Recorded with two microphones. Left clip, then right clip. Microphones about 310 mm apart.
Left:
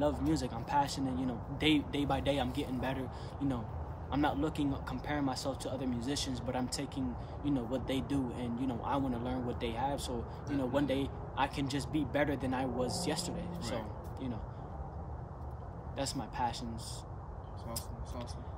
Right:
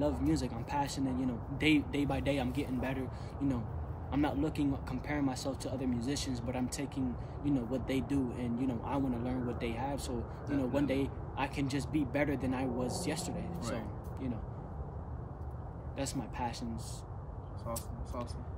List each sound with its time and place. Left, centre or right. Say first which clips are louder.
0.0 s speech: even; centre
16.0 s speech: left 2 dB; centre